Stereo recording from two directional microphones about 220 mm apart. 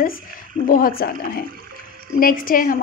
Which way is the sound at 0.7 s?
40° left (ahead or behind).